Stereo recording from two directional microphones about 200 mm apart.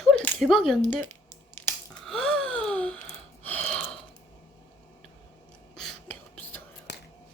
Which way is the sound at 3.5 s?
5° left (ahead or behind).